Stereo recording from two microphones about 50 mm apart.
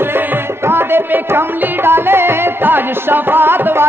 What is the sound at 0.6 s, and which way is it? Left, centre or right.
Music, right.